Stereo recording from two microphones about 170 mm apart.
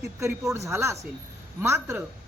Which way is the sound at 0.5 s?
15° right (ahead or behind).